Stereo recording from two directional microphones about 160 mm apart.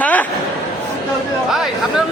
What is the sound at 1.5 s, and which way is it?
Speech, centre (ahead or behind).